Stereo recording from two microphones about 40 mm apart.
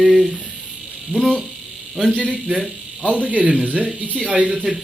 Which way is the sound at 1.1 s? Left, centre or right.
Centre.